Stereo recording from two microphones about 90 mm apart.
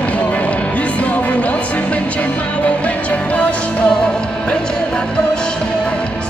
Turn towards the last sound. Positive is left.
turn(degrees=10)  # may be behind; listen again after turning